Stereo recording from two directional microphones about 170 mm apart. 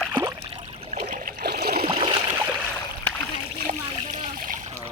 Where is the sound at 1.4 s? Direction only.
75° right (ahead or behind).